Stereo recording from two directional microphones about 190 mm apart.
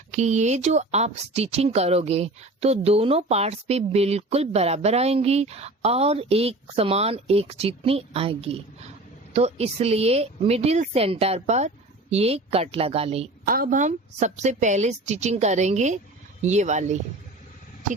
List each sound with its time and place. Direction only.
0.1 s speech: 40° right (ahead or behind)
13.4 s speech: 50° right (ahead or behind)